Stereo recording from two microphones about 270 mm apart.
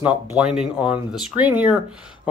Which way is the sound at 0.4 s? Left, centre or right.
Centre.